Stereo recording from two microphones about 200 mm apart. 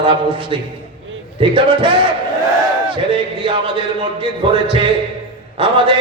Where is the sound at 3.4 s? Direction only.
25° right (ahead or behind).